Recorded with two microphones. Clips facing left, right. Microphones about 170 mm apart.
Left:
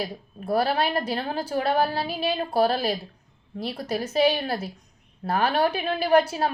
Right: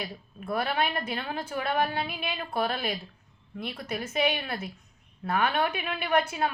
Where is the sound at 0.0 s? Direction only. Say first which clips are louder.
Left 6 dB; 35° left (ahead or behind).